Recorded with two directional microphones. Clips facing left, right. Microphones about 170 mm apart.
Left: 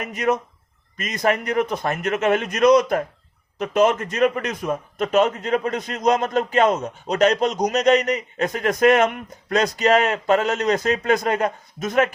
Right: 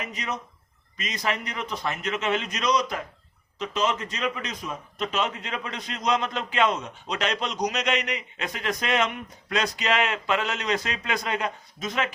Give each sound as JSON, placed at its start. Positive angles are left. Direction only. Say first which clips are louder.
{"t": 0.0, "sound": "a man's voice", "louder": "left 11 dB", "side_deg": 55}